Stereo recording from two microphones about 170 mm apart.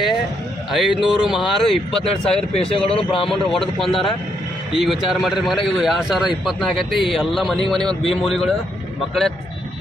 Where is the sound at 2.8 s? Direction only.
35° left (ahead or behind).